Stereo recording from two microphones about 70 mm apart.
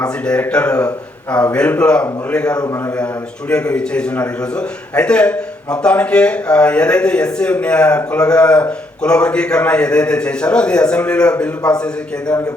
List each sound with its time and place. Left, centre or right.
0.0 s a man's voice: centre